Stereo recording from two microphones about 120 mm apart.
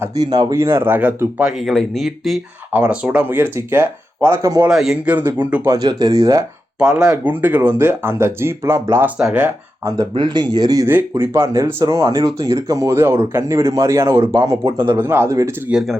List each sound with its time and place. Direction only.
0.2 s speech: 35° right (ahead or behind); by 1.5 s 15° right (ahead or behind)
1.6 s speech: centre (ahead or behind)
2.7 s speech: 10° right (ahead or behind)
4.7 s speech: 5° right (ahead or behind)
5.1 s speech: 15° right (ahead or behind)
5.6 s speech: 30° right (ahead or behind)
6.7 s speech: 5° right (ahead or behind)
10.2 s speech: 40° right (ahead or behind)
10.8 s speech: 20° right (ahead or behind)